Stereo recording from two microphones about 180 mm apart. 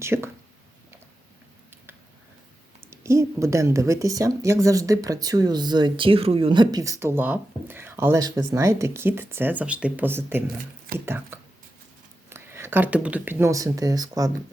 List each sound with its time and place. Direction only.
0.0 s a woman's voice: 15° right (ahead or behind)
2.9 s a woman's voice: 15° right (ahead or behind)